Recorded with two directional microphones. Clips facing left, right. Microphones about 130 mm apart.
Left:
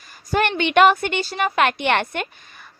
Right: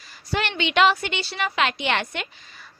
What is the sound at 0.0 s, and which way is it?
A woman's voice, 50° left (ahead or behind).